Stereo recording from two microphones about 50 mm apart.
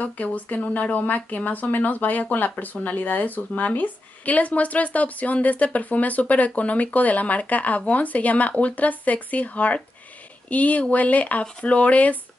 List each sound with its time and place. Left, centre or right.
0.0 s speech: left